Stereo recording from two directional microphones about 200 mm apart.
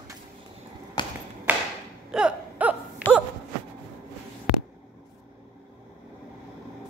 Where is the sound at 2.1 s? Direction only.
5° right (ahead or behind).